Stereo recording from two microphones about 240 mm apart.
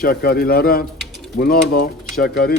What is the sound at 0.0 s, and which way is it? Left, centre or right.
Speech, left.